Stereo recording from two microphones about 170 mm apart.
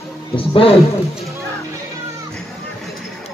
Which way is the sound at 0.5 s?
35° left (ahead or behind).